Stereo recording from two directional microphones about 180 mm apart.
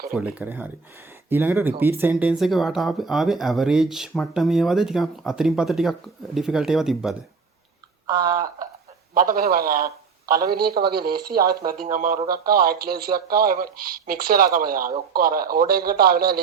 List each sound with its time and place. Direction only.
0.1 s speech: 5° right (ahead or behind)
8.0 s a sound: 20° right (ahead or behind)
9.1 s a man's voice: 55° right (ahead or behind)